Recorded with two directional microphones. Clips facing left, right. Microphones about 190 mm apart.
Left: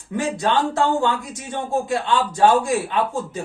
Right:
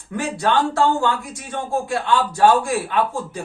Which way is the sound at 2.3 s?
20° left (ahead or behind).